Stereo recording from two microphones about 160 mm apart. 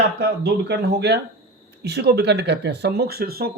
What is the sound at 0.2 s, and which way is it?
Speech, 90° right.